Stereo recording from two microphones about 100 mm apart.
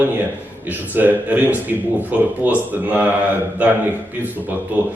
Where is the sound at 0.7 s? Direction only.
20° right (ahead or behind).